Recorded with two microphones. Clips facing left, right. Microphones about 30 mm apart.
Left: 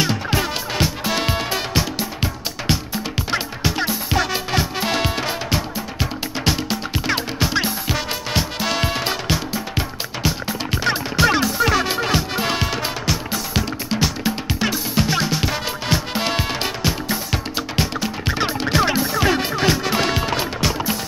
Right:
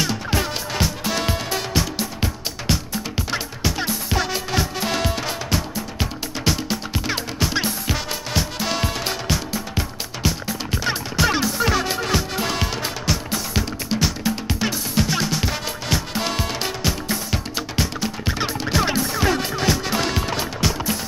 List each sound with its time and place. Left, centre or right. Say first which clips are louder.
0.0 s music: left 2 dB; centre
8.3 s music: left 1 dB; centre
11.8 s music: left 2 dB; centre
14.2 s music: left 1 dB; centre